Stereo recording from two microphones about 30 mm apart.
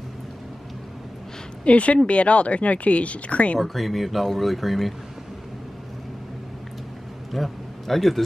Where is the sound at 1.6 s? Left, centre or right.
Left.